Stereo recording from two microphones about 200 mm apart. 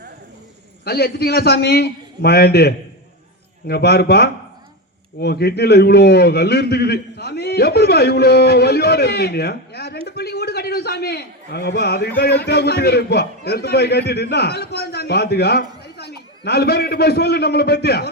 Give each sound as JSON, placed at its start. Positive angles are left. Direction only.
{"t": 0.9, "sound": "a man's voice", "side_deg": 50}